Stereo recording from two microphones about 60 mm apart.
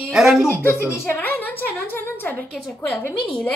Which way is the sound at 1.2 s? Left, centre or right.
Left.